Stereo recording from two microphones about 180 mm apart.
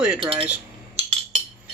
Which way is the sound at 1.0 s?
35° right (ahead or behind).